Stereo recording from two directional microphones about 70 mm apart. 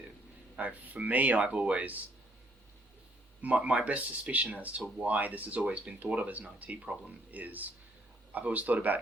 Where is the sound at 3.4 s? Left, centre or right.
Right.